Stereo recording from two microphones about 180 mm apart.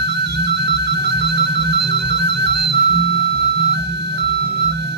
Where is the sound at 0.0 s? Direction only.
70° right (ahead or behind).